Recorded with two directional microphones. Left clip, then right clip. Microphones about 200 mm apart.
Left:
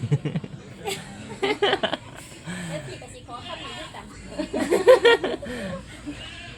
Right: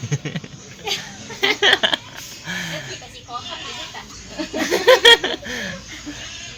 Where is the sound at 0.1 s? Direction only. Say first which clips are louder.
Right 2 dB; 15° left (ahead or behind); by 2.7 s centre (ahead or behind).